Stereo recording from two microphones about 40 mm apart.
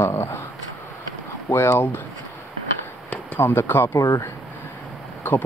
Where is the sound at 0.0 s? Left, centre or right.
Left.